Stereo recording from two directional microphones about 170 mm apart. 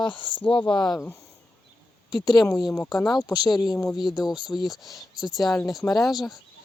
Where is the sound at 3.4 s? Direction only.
20° left (ahead or behind).